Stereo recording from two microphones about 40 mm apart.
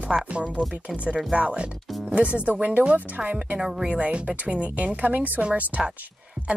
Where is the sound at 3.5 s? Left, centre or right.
Centre.